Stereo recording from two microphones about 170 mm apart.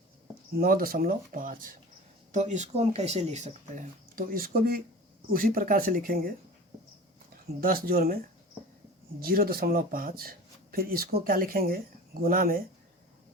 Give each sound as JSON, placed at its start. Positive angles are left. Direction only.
{"t": 0.6, "sound": "speech", "side_deg": -60}
{"t": 7.6, "sound": "speech", "side_deg": -60}
{"t": 9.2, "sound": "speech", "side_deg": -60}